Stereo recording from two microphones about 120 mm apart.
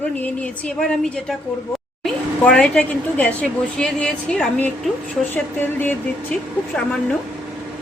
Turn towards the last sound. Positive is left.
turn(degrees=5)  # may be behind; listen again after turning